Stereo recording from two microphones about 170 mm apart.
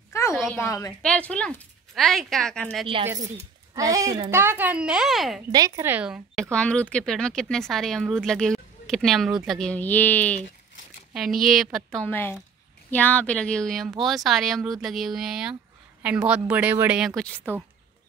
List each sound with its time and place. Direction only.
0.1 s a sound: 15° left (ahead or behind)
0.6 s a woman's voice: 20° left (ahead or behind)
1.0 s speech: 5° left (ahead or behind)
3.7 s speech: 20° right (ahead or behind); by 5.4 s centre (ahead or behind)
5.5 s speech: 20° right (ahead or behind)
6.5 s speech: 5° left (ahead or behind)
11.1 s speech: centre (ahead or behind)